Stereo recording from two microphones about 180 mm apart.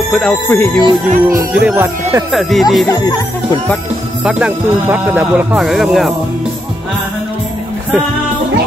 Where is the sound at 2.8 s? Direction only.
20° left (ahead or behind).